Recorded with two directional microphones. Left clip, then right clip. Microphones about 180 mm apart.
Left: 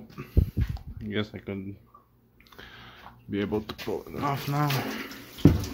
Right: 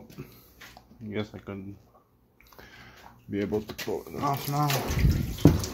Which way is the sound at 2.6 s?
15° left (ahead or behind).